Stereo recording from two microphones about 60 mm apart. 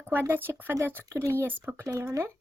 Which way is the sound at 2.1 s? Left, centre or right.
Right.